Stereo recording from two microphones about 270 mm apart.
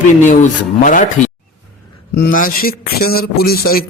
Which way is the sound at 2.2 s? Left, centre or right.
Left.